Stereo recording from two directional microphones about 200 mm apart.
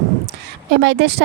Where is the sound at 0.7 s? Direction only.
55° right (ahead or behind).